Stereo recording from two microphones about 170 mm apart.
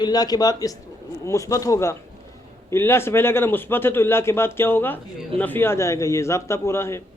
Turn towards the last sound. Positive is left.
turn(degrees=15)  # may be behind; listen again after turning